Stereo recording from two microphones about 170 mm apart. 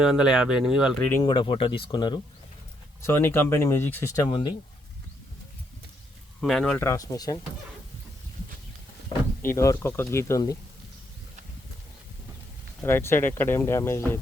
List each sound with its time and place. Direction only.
0.0 s speech: 5° right (ahead or behind)
1.2 s speech: 25° left (ahead or behind)
3.0 s speech: 15° left (ahead or behind)
6.4 s speech: centre (ahead or behind)
6.7 s speech: 15° left (ahead or behind)
9.4 s speech: 15° left (ahead or behind)
12.8 s speech: 15° left (ahead or behind)